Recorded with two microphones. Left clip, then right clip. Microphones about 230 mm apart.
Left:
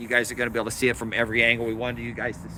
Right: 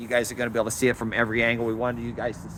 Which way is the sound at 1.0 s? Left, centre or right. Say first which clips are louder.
Left 1 dB; right.